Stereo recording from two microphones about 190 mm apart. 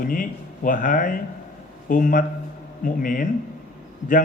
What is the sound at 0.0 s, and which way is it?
Speech, 45° left (ahead or behind).